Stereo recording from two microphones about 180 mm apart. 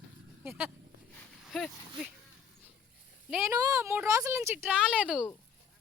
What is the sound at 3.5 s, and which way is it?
Speech, 15° right (ahead or behind).